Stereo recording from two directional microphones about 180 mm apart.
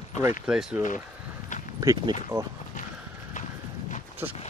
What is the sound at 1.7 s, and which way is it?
Speech, 20° right (ahead or behind).